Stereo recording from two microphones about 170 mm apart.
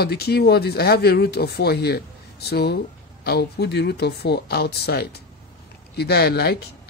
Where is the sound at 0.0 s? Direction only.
70° left (ahead or behind).